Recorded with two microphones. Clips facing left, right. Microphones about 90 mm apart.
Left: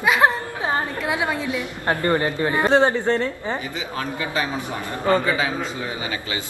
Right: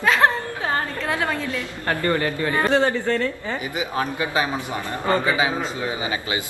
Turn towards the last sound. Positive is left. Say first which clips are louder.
# left 1 dB
turn(degrees=-15)  # may be behind; listen again after turning